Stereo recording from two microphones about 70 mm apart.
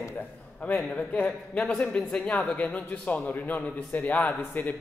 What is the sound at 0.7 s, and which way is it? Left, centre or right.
A man's voice, centre.